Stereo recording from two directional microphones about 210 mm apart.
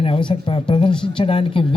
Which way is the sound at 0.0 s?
25° left (ahead or behind).